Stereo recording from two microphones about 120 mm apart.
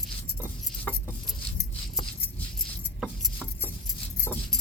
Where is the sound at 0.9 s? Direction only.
10° left (ahead or behind).